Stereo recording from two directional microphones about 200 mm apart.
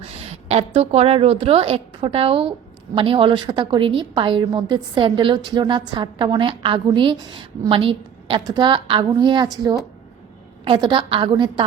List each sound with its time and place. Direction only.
0.0 s a woman's voice: 30° right (ahead or behind)